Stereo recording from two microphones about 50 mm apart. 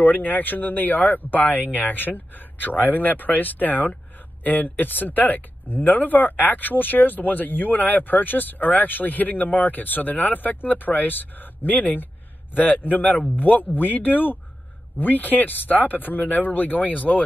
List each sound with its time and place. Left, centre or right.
0.0 s speech: left